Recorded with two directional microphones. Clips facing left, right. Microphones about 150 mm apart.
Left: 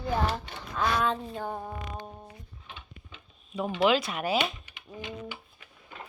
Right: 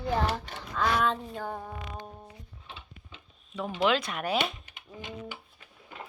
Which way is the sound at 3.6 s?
10° left (ahead or behind).